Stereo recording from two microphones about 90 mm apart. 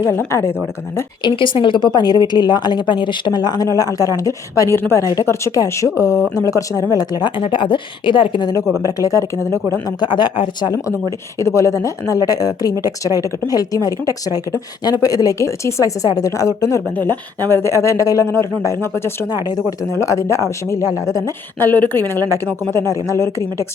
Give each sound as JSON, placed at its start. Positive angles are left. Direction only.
{"t": 0.0, "sound": "speech", "side_deg": 30}
{"t": 1.2, "sound": "a woman's voice", "side_deg": 70}
{"t": 8.9, "sound": "speech", "side_deg": 40}
{"t": 9.8, "sound": "a woman's voice", "side_deg": 55}
{"t": 11.3, "sound": "speech", "side_deg": 35}
{"t": 16.9, "sound": "speech", "side_deg": 20}
{"t": 21.6, "sound": "a woman's voice", "side_deg": 20}